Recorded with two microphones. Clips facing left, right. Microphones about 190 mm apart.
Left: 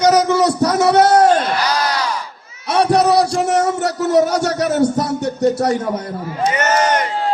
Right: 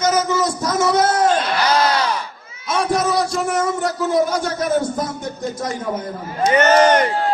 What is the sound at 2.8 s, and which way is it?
Speech, 65° left (ahead or behind).